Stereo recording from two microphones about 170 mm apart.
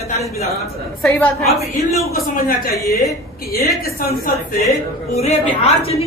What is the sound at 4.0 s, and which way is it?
Speech, 60° left (ahead or behind).